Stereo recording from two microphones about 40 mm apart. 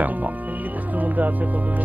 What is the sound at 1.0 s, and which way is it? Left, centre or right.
Music, right.